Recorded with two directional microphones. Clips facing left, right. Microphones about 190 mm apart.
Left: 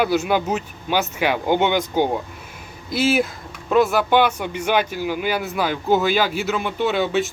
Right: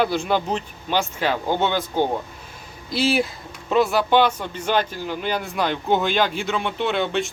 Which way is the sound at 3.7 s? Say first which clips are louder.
Left 1 dB; centre (ahead or behind).